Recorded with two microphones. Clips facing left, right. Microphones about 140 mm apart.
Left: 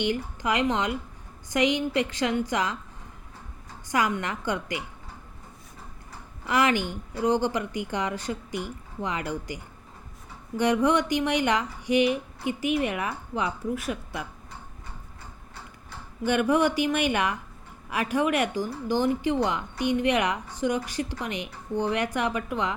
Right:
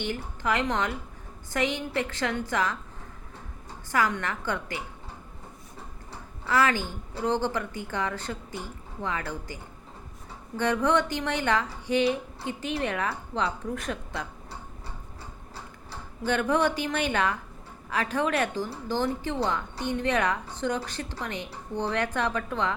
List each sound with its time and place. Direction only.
0.0 s speech: 15° left (ahead or behind)
3.9 s speech: 15° left (ahead or behind)
6.4 s speech: 15° left (ahead or behind)
10.6 s speech: 15° left (ahead or behind)
16.2 s speech: 10° left (ahead or behind)